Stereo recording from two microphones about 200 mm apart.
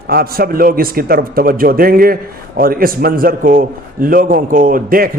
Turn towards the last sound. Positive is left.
turn(degrees=-45)  # may be behind; listen again after turning